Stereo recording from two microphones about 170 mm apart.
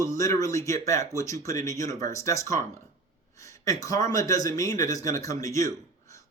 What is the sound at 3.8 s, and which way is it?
Speech, 20° left (ahead or behind).